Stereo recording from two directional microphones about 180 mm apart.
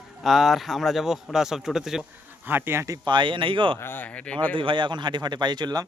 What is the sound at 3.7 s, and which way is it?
Speech, 10° left (ahead or behind).